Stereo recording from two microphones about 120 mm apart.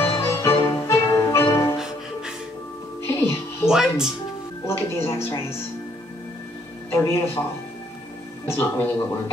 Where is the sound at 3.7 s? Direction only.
5° right (ahead or behind).